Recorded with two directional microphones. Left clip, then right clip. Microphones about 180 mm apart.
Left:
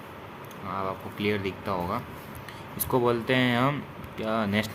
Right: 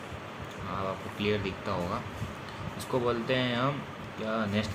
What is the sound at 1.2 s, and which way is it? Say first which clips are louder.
Speech: left 2 dB; 40° left (ahead or behind).